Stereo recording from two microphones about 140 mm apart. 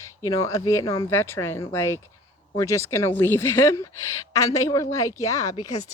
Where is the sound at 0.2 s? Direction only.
25° left (ahead or behind).